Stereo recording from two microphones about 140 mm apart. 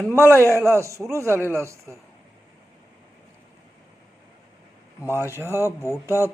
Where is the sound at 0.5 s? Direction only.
20° right (ahead or behind).